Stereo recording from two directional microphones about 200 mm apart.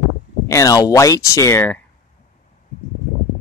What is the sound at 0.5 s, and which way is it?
A man's voice, 15° left (ahead or behind).